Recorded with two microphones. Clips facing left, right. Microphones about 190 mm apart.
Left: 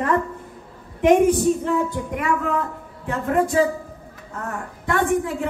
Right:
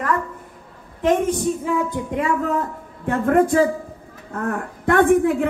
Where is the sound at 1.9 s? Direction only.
25° right (ahead or behind).